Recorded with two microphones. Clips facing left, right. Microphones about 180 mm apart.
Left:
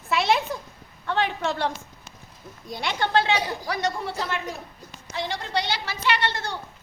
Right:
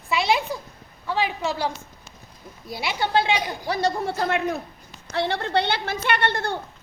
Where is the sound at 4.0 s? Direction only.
55° right (ahead or behind).